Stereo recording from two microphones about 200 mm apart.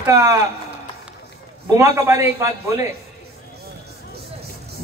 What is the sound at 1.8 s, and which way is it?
A man's voice, 15° right (ahead or behind).